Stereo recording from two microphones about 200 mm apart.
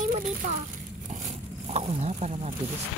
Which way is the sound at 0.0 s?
40° right (ahead or behind).